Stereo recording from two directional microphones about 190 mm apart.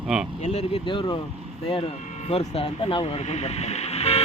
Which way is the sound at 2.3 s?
30° left (ahead or behind).